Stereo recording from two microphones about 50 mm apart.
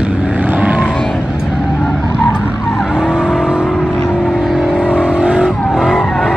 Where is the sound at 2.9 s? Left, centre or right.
Centre.